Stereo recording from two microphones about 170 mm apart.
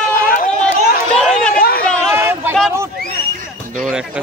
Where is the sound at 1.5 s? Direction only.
60° left (ahead or behind).